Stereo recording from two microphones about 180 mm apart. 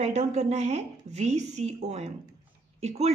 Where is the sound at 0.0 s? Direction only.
40° right (ahead or behind).